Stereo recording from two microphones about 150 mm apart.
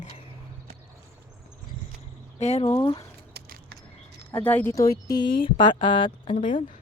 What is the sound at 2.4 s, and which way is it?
Speech, 45° left (ahead or behind).